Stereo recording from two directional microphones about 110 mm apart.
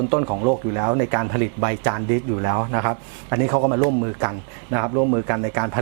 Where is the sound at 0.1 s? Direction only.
15° right (ahead or behind).